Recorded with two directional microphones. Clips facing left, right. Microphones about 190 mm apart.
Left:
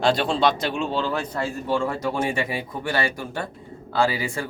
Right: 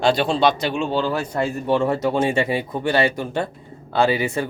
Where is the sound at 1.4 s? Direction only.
20° right (ahead or behind).